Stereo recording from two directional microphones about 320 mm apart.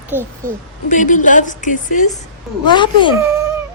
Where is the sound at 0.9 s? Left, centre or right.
Left.